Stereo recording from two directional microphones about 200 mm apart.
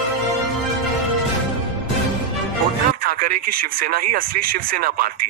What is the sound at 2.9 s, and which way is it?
Speech, 45° right (ahead or behind).